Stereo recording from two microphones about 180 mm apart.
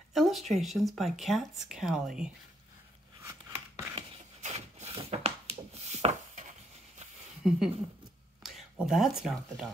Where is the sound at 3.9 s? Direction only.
35° right (ahead or behind).